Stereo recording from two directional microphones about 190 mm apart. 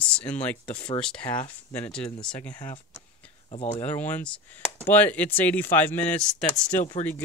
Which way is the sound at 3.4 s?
35° left (ahead or behind).